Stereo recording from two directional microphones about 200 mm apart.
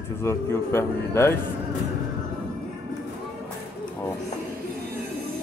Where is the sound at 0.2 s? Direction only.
10° left (ahead or behind).